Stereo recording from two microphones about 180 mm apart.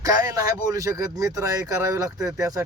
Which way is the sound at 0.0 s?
20° right (ahead or behind).